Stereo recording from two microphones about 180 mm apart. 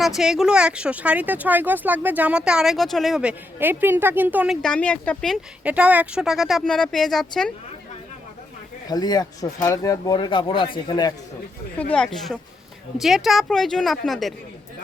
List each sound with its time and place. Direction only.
0.2 s speech: centre (ahead or behind)
4.6 s a woman's voice: 5° left (ahead or behind)
5.6 s a woman's voice: 10° right (ahead or behind)
8.9 s speech: 20° left (ahead or behind)
11.8 s a woman's voice: 5° left (ahead or behind)